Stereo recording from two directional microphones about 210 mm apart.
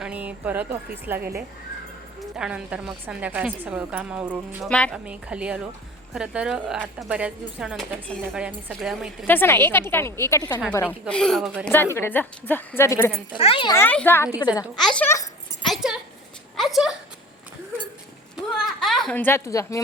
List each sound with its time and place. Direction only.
0.0 s speech: 5° right (ahead or behind)
2.3 s a woman's voice: 5° right (ahead or behind)
4.7 s a woman's voice: 5° left (ahead or behind)
5.0 s a woman's voice: 5° right (ahead or behind)
9.2 s a woman's voice: 10° left (ahead or behind)
10.8 s a woman's voice: centre (ahead or behind)
11.7 s a woman's voice: 10° left (ahead or behind)
13.3 s a woman's voice: 25° left (ahead or behind)
14.8 s a woman's voice: 5° left (ahead or behind)
15.6 s a sound: centre (ahead or behind)
18.5 s giggle: centre (ahead or behind)